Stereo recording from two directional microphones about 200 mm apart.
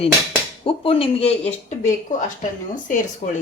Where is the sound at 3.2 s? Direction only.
30° left (ahead or behind).